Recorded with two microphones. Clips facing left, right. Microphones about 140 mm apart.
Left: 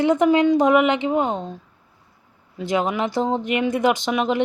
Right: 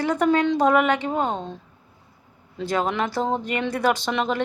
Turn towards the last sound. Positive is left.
turn(degrees=15)  # may be behind; listen again after turning